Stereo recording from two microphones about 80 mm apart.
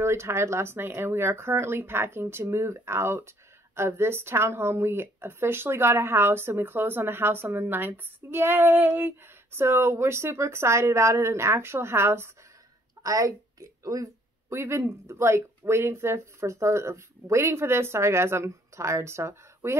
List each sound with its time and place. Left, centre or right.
0.0 s speech: right
13.0 s speech: right
14.5 s speech: right